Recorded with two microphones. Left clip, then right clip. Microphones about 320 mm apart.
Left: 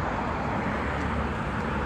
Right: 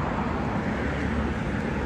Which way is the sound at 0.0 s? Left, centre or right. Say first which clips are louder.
Even; left.